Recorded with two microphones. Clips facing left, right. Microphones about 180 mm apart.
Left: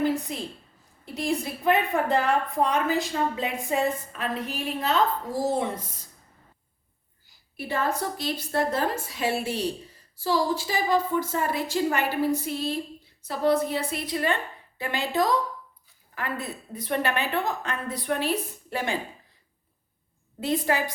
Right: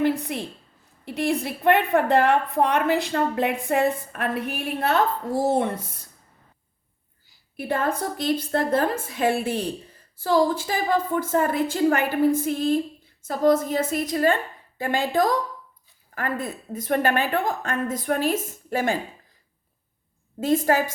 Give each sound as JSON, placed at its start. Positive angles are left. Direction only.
{"t": 0.0, "sound": "a sound", "side_deg": -60}
{"t": 1.0, "sound": "a woman's voice", "side_deg": -65}
{"t": 7.5, "sound": "a woman's voice", "side_deg": -55}
{"t": 20.4, "sound": "a woman's voice", "side_deg": -45}